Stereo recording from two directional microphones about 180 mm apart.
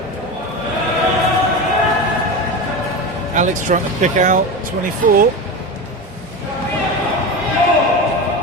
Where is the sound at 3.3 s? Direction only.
45° right (ahead or behind).